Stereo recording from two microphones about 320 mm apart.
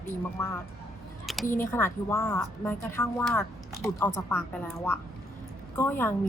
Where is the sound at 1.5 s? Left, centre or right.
Centre.